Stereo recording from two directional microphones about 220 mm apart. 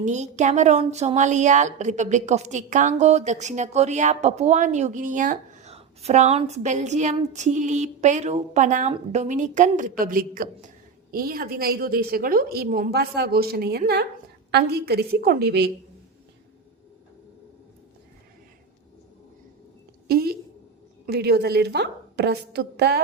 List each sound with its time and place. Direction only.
0.0 s a woman's voice: 30° right (ahead or behind); by 15.7 s 50° right (ahead or behind)
20.1 s a sound: 45° right (ahead or behind)
21.1 s a woman's voice: 45° right (ahead or behind)